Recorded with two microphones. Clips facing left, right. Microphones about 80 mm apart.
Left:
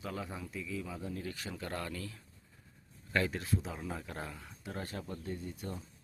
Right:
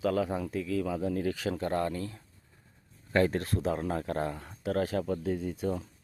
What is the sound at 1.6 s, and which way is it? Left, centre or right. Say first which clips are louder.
Speech: right 7 dB; right.